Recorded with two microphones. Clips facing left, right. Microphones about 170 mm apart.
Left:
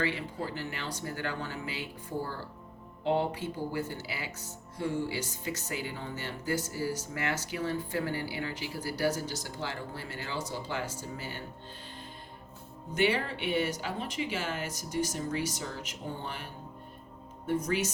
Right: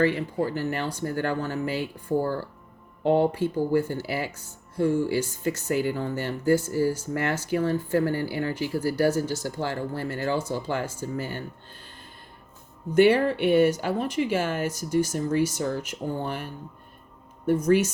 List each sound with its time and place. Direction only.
0.0 s speech: 45° right (ahead or behind)
13.0 s speech: 45° right (ahead or behind)